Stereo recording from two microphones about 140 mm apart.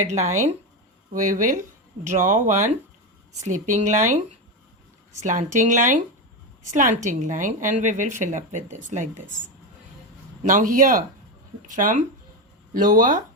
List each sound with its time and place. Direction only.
0.1 s speech: 55° right (ahead or behind)
1.1 s a woman's voice: 70° right (ahead or behind)
5.2 s a woman's voice: 60° right (ahead or behind)
10.4 s speech: 65° right (ahead or behind)